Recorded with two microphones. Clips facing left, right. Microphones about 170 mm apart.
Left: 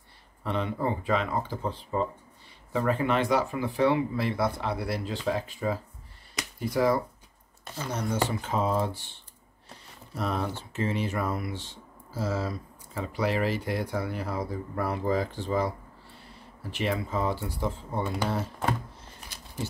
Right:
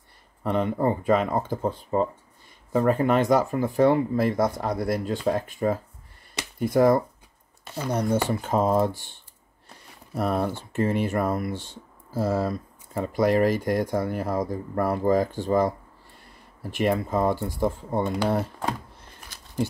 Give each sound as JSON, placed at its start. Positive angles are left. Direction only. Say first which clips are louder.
{"t": 0.4, "sound": "speech", "louder": "right 5 dB", "side_deg": -45}
{"t": 8.5, "sound": "speech", "louder": "right 8 dB", "side_deg": -45}
{"t": 10.1, "sound": "speech", "louder": "right 5 dB", "side_deg": -50}
{"t": 16.7, "sound": "speech", "louder": "right 6 dB", "side_deg": -50}